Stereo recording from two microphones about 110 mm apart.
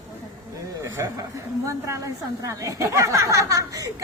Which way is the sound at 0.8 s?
25° right (ahead or behind).